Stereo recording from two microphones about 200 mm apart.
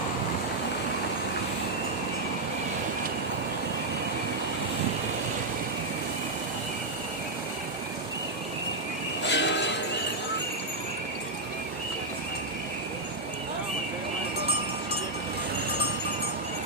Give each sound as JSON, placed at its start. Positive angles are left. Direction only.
{"t": 9.2, "sound": "music", "side_deg": 60}